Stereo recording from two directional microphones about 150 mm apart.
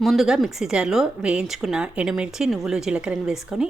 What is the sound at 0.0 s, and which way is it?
A woman's voice, centre (ahead or behind).